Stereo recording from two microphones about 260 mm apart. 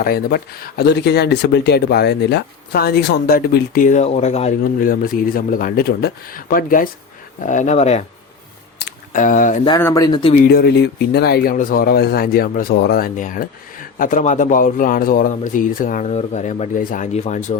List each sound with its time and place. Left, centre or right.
0.0 s speech: left
8.8 s a sound: left
9.6 s speech: centre
10.4 s speech: left